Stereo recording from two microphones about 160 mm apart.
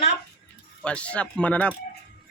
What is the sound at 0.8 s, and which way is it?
Speech, 5° left (ahead or behind).